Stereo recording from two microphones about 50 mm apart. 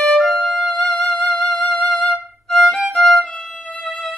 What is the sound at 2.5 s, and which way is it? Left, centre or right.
Violin, centre.